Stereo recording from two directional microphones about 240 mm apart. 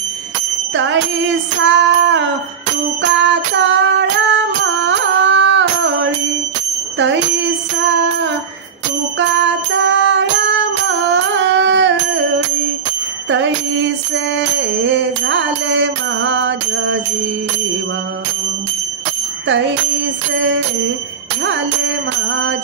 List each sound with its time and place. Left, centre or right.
0.7 s music: right
9.3 s music: right
13.3 s music: right
20.3 s music: right